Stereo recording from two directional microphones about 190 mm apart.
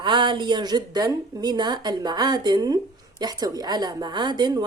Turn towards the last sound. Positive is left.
turn(degrees=-20)  # may be behind; listen again after turning